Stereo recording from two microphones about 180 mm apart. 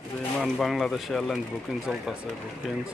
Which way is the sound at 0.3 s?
Centre (ahead or behind).